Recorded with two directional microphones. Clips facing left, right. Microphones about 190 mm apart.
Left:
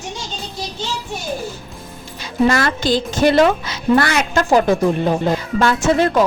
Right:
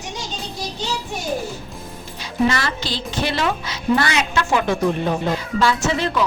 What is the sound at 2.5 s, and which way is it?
A woman's voice, 50° left (ahead or behind).